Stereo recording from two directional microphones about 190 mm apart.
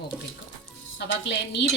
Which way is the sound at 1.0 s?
65° left (ahead or behind).